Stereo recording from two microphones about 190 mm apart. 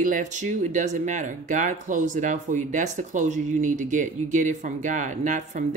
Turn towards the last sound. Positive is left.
turn(degrees=-40)  # may be behind; listen again after turning